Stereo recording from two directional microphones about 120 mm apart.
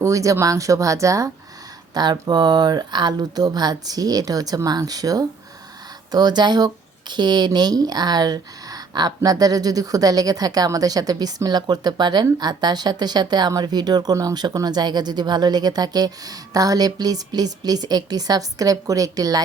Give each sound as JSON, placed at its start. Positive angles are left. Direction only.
{"t": 0.0, "sound": "speech", "side_deg": -25}